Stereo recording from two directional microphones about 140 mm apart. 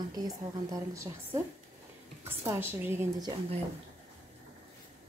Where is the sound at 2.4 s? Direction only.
15° right (ahead or behind).